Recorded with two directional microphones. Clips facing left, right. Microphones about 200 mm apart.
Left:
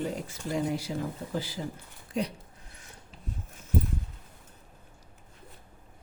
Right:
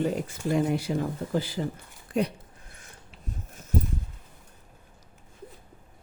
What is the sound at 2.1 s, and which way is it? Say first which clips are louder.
Speech: right 5 dB; 55° right (ahead or behind).